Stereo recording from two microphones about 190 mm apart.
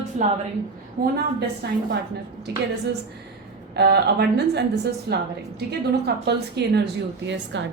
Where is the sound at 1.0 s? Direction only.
55° right (ahead or behind).